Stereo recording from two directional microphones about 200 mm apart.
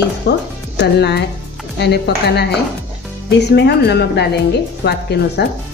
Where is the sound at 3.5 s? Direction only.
55° left (ahead or behind).